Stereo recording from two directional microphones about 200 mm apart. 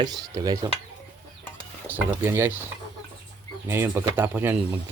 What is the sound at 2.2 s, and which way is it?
Speech, 10° right (ahead or behind).